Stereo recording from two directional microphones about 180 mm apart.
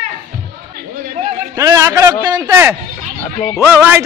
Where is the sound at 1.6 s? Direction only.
15° right (ahead or behind).